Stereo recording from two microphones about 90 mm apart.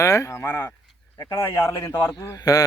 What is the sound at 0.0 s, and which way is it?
Speech, 35° left (ahead or behind).